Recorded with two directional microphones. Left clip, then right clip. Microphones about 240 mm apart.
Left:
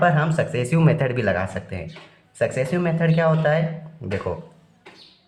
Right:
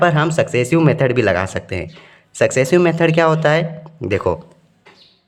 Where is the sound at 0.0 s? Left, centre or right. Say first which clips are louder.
Right 5 dB; right.